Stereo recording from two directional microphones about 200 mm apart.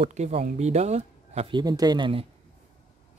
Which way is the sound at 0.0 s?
30° right (ahead or behind).